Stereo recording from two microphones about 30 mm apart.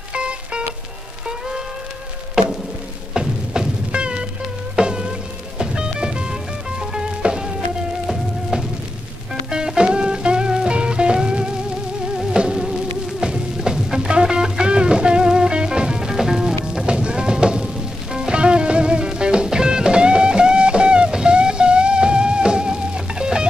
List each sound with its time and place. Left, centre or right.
0.1 s music: right
3.2 s music: right
9.5 s music: right
13.6 s music: centre
16.6 s music: right